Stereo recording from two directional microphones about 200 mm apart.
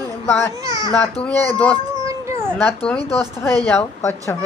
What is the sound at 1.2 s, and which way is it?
Speech, 5° left (ahead or behind).